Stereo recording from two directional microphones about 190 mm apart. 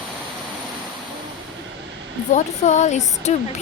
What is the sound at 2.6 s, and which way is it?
Speech, 40° left (ahead or behind).